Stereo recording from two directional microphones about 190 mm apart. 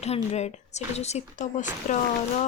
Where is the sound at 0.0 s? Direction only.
35° left (ahead or behind).